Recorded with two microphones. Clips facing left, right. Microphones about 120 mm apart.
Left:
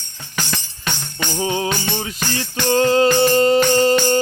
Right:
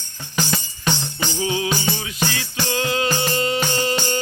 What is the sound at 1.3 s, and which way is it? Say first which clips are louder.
Music: left 2 dB; 40° left (ahead or behind).